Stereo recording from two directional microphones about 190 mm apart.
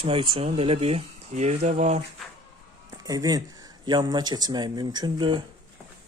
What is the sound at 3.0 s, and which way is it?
Speech, 20° right (ahead or behind).